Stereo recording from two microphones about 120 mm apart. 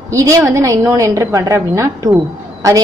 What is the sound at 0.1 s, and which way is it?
A woman's voice, 25° right (ahead or behind).